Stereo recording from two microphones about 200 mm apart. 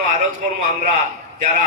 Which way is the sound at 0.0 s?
40° right (ahead or behind).